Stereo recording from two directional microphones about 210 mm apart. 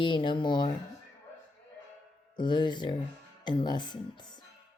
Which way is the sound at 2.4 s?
20° left (ahead or behind).